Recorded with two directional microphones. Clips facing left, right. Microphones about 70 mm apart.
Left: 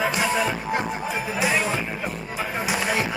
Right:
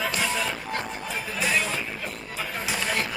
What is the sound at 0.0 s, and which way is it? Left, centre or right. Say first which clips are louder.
Music: left 5 dB; centre.